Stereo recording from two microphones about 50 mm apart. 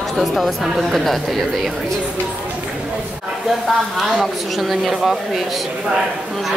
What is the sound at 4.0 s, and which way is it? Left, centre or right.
Speech, centre.